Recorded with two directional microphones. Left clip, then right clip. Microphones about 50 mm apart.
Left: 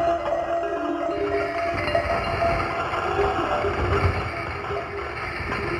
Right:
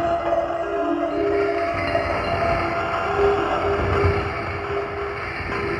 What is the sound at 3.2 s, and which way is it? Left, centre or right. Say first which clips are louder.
Vehicle: right 4 dB; right.